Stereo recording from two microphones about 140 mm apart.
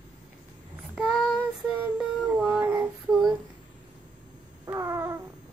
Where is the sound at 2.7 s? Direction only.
20° right (ahead or behind).